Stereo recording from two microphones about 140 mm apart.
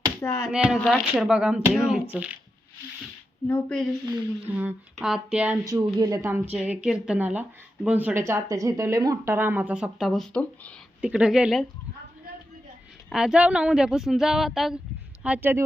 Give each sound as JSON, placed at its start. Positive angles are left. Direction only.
{"t": 0.2, "sound": "a sound", "side_deg": 25}
{"t": 0.5, "sound": "speech", "side_deg": -5}
{"t": 3.4, "sound": "a woman's voice", "side_deg": 15}
{"t": 4.9, "sound": "speech", "side_deg": -5}
{"t": 5.6, "sound": "speech", "side_deg": -25}
{"t": 8.3, "sound": "speech", "side_deg": -20}
{"t": 11.0, "sound": "speech", "side_deg": -5}
{"t": 13.1, "sound": "speech", "side_deg": -5}